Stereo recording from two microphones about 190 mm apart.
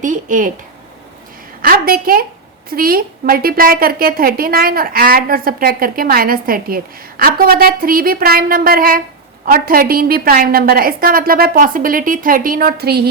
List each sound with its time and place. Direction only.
0.0 s a woman's voice: 45° right (ahead or behind)
1.6 s a woman's voice: 50° right (ahead or behind)